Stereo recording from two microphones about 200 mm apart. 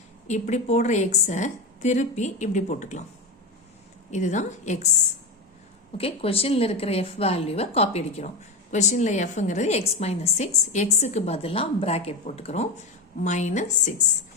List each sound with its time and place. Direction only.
0.3 s a woman's voice: 35° left (ahead or behind)
4.1 s a woman's voice: 35° left (ahead or behind)
6.0 s a woman's voice: 30° left (ahead or behind)